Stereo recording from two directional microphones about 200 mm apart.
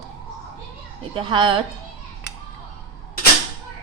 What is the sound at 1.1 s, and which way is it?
Speech, 25° right (ahead or behind).